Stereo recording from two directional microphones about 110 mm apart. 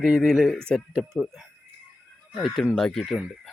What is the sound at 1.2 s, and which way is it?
Speech, 5° right (ahead or behind).